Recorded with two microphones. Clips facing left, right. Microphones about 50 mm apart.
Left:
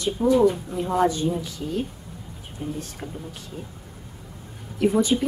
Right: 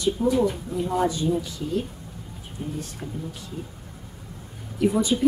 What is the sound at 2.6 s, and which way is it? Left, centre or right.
Speech, left.